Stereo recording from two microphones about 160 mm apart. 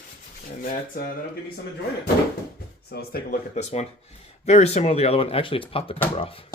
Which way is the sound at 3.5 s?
45° left (ahead or behind).